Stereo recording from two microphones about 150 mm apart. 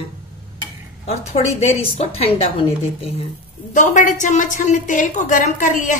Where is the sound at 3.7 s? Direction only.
60° left (ahead or behind).